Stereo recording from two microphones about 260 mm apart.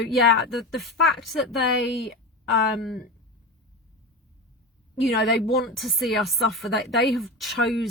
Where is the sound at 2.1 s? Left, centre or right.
Left.